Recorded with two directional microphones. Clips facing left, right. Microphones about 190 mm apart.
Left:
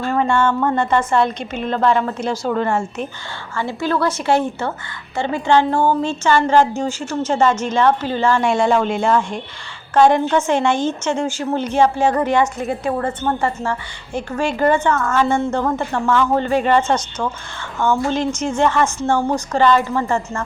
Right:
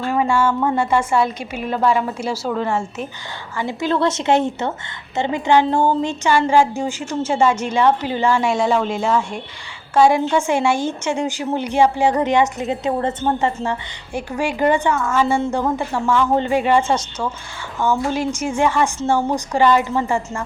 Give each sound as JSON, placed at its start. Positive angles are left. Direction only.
{"t": 0.1, "sound": "a woman's voice", "side_deg": -10}
{"t": 3.5, "sound": "a woman's voice", "side_deg": -15}
{"t": 8.4, "sound": "a woman's voice", "side_deg": 0}